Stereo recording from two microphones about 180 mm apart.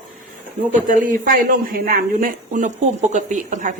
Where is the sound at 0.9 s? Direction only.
50° right (ahead or behind).